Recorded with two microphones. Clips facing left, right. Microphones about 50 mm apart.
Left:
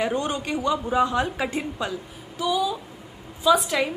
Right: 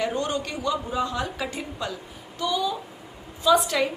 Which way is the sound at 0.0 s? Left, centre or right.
Centre.